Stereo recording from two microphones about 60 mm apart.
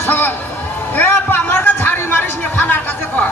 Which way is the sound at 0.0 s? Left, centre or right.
Left.